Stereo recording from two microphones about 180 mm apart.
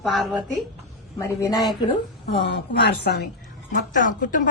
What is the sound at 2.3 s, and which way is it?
Speech, 70° left (ahead or behind).